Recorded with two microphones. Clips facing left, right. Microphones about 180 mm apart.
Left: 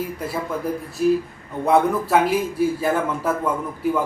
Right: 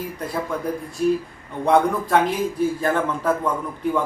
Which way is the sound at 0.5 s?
5° left (ahead or behind).